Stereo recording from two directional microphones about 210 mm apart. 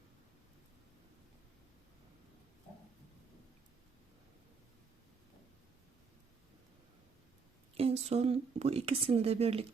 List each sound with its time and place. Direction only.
7.8 s a woman's voice: 30° right (ahead or behind)